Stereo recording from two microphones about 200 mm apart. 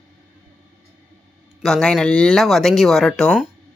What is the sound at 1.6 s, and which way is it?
A man's voice, 5° left (ahead or behind).